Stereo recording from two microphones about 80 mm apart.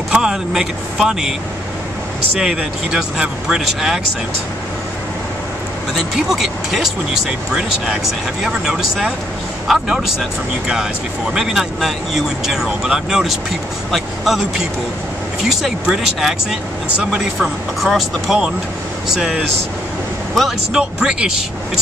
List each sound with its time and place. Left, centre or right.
0.1 s speech: centre
2.3 s speech: centre
5.9 s speech: centre
11.3 s speech: centre